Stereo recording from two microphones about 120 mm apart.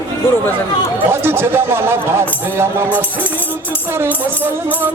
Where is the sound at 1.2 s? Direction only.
20° right (ahead or behind).